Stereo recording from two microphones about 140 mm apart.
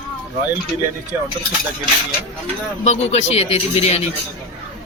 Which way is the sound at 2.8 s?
50° left (ahead or behind).